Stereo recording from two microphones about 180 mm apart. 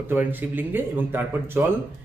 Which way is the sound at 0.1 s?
10° right (ahead or behind).